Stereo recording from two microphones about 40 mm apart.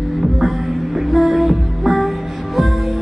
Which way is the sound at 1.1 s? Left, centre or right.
Centre.